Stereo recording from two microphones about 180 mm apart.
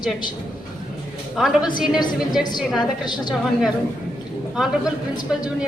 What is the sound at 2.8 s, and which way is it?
Speech, 25° left (ahead or behind).